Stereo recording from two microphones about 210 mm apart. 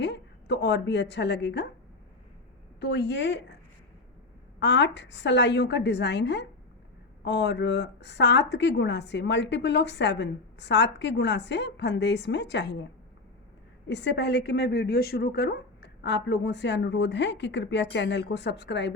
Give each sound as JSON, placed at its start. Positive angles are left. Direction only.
{"t": 0.0, "sound": "a woman's voice", "side_deg": 55}
{"t": 2.8, "sound": "speech", "side_deg": 55}
{"t": 4.6, "sound": "speech", "side_deg": 55}